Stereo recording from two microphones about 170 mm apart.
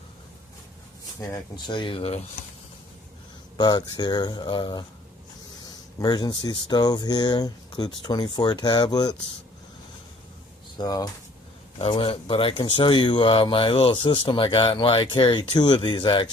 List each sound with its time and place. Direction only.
1.2 s speech: 25° left (ahead or behind)
3.6 s speech: 25° left (ahead or behind)
10.8 s speech: 20° left (ahead or behind)
11.8 s speech: 35° left (ahead or behind)